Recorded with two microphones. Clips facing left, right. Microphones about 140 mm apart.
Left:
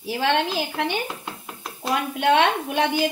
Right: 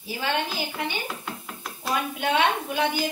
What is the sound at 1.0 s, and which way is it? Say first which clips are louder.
Dishes: left 1 dB; 20° left (ahead or behind).